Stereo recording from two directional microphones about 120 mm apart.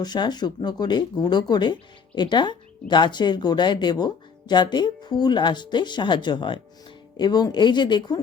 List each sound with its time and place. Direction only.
0.0 s speech: 35° left (ahead or behind)